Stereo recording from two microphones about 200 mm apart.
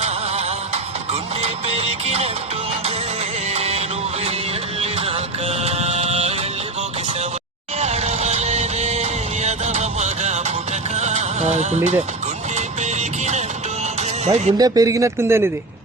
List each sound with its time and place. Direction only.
0.0 s music: 30° right (ahead or behind)
3.5 s music: 30° right (ahead or behind)
7.8 s music: 35° right (ahead or behind)
14.3 s speech: 35° right (ahead or behind)
14.6 s speech: 15° right (ahead or behind)